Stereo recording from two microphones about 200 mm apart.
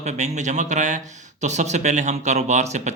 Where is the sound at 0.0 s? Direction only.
35° right (ahead or behind).